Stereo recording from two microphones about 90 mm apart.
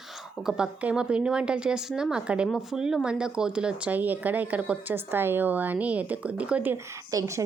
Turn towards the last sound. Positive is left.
turn(degrees=-35)  # may be behind; listen again after turning